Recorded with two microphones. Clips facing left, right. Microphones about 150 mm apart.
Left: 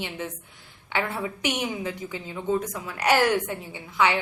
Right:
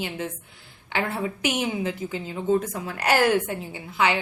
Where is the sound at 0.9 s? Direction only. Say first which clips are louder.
Right 1 dB; 30° right (ahead or behind).